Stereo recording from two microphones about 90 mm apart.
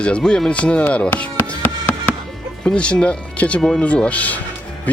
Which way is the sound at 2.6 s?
10° left (ahead or behind).